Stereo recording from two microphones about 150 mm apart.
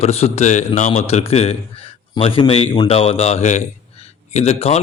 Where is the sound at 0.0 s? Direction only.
45° left (ahead or behind).